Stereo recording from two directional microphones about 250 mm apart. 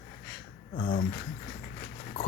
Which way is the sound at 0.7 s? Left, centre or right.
Left.